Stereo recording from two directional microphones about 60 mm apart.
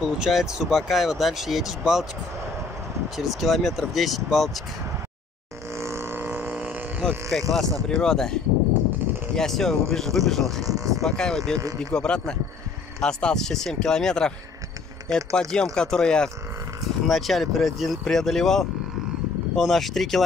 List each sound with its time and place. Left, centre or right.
0.0 s speech: centre
3.2 s speech: centre
5.8 s vehicle: right; by 6.8 s centre
7.2 s speech: centre
10.6 s speech: right
11.1 s speech: centre
17.1 s speech: centre